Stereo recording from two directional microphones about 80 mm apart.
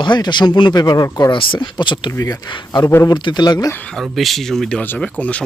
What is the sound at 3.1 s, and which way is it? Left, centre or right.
Speech, left.